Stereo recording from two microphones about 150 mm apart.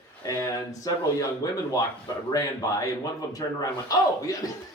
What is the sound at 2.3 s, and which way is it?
Speech, 20° left (ahead or behind).